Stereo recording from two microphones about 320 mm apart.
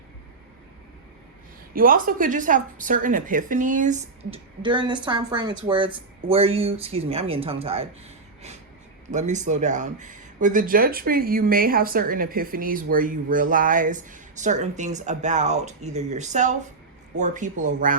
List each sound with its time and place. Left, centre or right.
1.7 s a woman's voice: right
9.0 s speech: right